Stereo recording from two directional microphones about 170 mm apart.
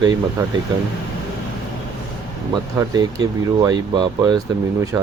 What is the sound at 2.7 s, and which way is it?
Speech, 25° right (ahead or behind).